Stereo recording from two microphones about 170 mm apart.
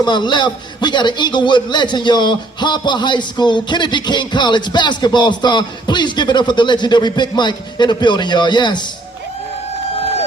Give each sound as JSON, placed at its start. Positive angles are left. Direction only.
{"t": 0.0, "sound": "a man's voice", "side_deg": 25}